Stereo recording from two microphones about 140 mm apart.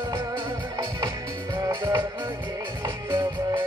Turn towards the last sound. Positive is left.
turn(degrees=-30)  # may be behind; listen again after turning